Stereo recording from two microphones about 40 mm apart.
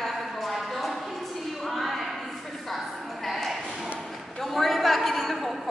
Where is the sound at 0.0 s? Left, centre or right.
Centre.